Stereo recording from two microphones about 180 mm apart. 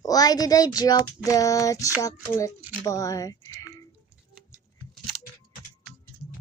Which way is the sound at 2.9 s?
20° left (ahead or behind).